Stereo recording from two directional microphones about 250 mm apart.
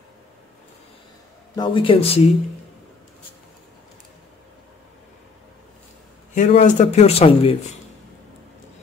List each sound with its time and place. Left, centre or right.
1.5 s speech: centre
6.3 s speech: left